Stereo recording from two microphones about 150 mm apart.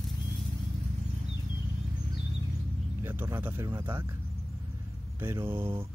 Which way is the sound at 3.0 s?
15° right (ahead or behind).